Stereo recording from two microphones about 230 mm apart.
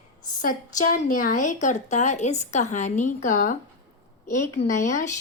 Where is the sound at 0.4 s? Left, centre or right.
Left.